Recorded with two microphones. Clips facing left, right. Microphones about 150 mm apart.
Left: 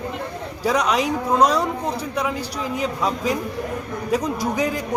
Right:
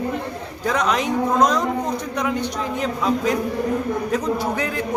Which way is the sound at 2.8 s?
10° left (ahead or behind).